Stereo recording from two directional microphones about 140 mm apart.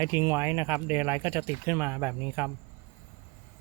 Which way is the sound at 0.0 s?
20° right (ahead or behind).